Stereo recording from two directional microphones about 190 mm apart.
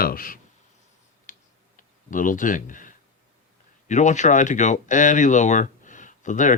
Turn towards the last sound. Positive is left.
turn(degrees=40)  # may be behind; listen again after turning